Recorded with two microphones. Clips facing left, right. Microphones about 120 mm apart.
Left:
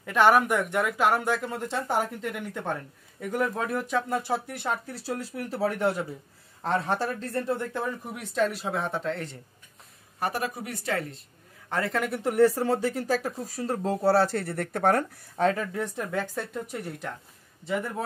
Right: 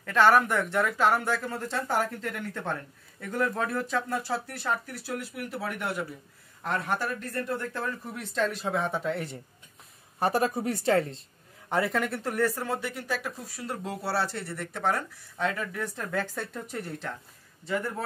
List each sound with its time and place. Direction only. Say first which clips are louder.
0.0 s speech: left 1 dB; 15° left (ahead or behind); by 9.4 s 10° right (ahead or behind)
10.1 s speech: right 4 dB; 30° right (ahead or behind)
12.1 s speech: left 6 dB; 20° left (ahead or behind); by 15.6 s 40° left (ahead or behind)
15.7 s a man's voice: left 2 dB; 20° left (ahead or behind)